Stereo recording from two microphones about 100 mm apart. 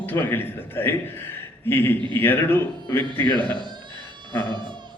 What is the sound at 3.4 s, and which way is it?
Speech, 50° right (ahead or behind).